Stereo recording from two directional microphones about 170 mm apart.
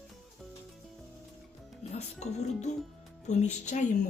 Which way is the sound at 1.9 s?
40° left (ahead or behind).